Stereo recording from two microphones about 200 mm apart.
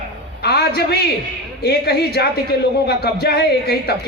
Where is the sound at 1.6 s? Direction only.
55° left (ahead or behind).